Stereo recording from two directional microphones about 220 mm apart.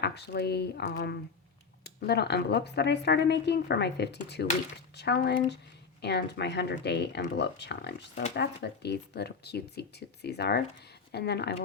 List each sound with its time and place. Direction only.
0.0 s speech: 50° left (ahead or behind)